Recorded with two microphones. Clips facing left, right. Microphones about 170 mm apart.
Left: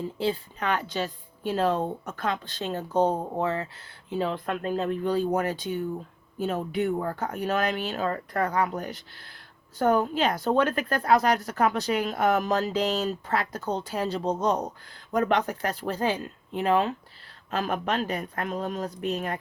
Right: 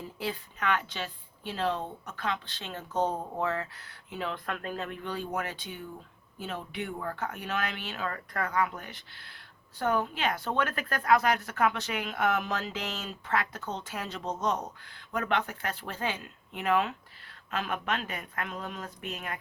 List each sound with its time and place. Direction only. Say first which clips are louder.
0.0 s speech: left 8 dB; 30° left (ahead or behind)